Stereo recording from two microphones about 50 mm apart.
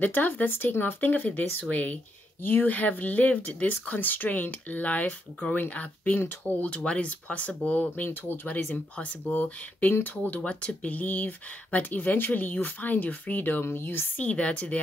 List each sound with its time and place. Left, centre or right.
0.0 s speech: left
8.6 s speech: centre
9.3 s speech: left
14.1 s speech: left